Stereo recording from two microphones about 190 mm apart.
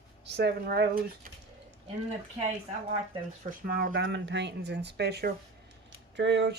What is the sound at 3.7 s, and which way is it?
Speech, 50° right (ahead or behind).